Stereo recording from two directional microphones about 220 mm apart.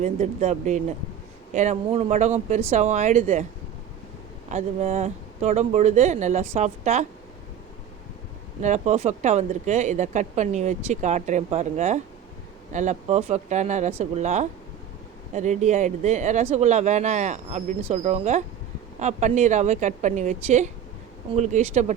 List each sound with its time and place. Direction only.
0.0 s speech: 30° right (ahead or behind)
4.4 s a woman's voice: 30° right (ahead or behind)
8.6 s speech: 30° right (ahead or behind)